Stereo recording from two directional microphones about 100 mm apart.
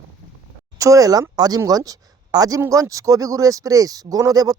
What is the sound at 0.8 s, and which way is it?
A man's voice, 35° right (ahead or behind).